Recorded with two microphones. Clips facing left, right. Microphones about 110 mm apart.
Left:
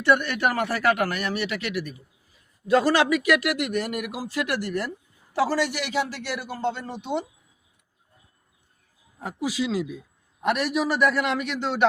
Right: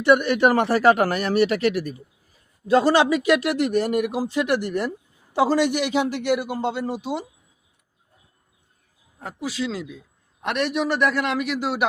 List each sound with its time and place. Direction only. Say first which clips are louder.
0.0 s a man's voice: right 5 dB; 15° right (ahead or behind)
9.1 s a man's voice: left 1 dB; 10° left (ahead or behind); by 11.9 s 10° right (ahead or behind)